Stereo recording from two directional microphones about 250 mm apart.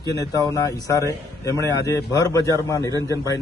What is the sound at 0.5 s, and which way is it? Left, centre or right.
A man's voice, centre.